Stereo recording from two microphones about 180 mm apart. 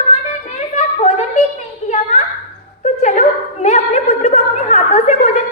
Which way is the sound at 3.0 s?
40° left (ahead or behind).